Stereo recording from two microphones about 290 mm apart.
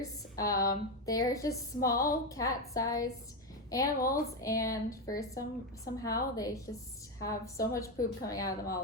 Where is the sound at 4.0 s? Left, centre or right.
Left.